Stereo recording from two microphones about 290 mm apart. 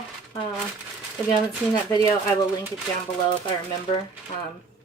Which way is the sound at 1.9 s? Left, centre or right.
Centre.